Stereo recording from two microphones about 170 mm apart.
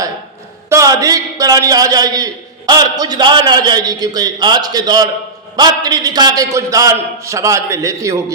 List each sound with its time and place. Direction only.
0.7 s a man's voice: 20° right (ahead or behind)